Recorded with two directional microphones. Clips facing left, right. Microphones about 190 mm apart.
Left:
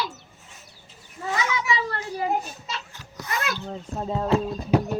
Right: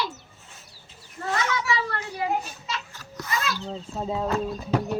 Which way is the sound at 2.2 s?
35° left (ahead or behind).